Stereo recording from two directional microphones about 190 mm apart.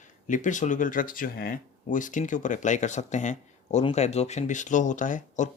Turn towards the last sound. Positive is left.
turn(degrees=40)  # may be behind; listen again after turning